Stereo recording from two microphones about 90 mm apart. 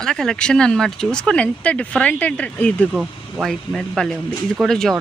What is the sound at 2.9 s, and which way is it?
Speech, 15° right (ahead or behind).